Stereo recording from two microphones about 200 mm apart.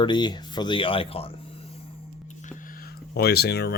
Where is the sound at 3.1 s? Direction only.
50° left (ahead or behind).